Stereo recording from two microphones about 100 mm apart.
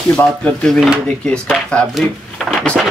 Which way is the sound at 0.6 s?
Centre (ahead or behind).